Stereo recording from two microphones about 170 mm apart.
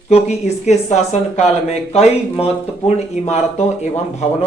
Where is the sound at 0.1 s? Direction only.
40° left (ahead or behind).